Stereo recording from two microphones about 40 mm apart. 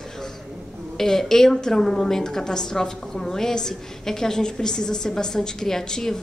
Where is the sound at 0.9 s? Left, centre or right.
Centre.